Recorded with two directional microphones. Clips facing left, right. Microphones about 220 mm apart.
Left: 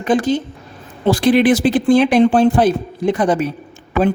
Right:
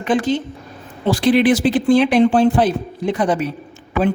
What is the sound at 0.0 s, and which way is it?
A man's voice, 40° left (ahead or behind).